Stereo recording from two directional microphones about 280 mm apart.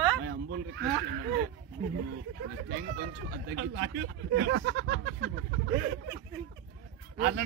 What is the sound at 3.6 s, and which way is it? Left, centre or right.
Speech, right.